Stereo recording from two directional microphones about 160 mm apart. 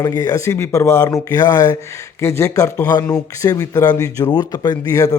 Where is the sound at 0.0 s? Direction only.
20° left (ahead or behind).